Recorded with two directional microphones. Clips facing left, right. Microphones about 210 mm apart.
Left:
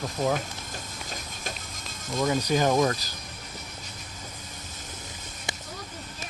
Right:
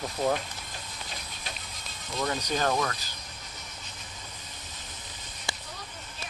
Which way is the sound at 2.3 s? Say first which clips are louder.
Left 5 dB; 10° left (ahead or behind).